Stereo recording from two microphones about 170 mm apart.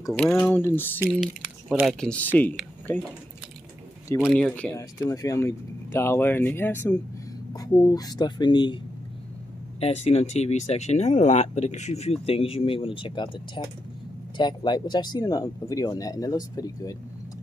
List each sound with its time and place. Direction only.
0.1 s speech: 10° left (ahead or behind)
1.2 s speech: centre (ahead or behind)
4.1 s speech: 10° left (ahead or behind)
4.7 s speech: 20° left (ahead or behind)
9.8 s speech: 35° left (ahead or behind); by 16.9 s 20° left (ahead or behind)